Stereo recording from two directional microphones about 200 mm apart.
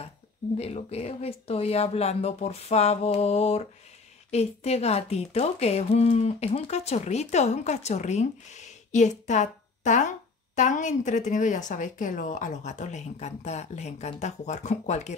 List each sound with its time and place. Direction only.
0.6 s speech: 30° left (ahead or behind)